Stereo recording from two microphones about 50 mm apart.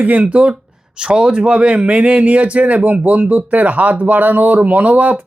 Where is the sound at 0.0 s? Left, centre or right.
Right.